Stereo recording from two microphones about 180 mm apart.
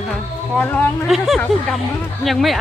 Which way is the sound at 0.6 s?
10° left (ahead or behind).